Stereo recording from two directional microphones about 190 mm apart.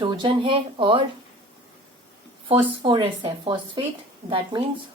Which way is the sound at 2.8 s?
25° right (ahead or behind).